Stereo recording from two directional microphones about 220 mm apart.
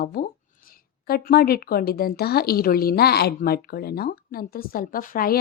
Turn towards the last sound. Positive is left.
turn(degrees=40)  # may be behind; listen again after turning